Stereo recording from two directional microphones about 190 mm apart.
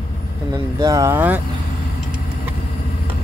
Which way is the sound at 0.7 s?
20° right (ahead or behind).